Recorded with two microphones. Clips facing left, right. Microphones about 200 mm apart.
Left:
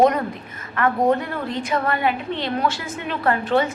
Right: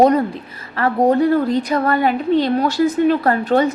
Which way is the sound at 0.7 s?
35° right (ahead or behind).